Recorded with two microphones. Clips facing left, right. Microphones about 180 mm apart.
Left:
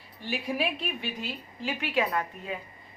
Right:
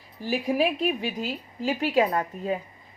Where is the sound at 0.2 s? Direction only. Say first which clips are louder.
Right 6 dB; 40° right (ahead or behind).